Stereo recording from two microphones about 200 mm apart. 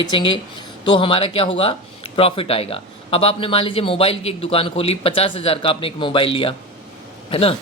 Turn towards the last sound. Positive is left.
turn(degrees=30)  # may be behind; listen again after turning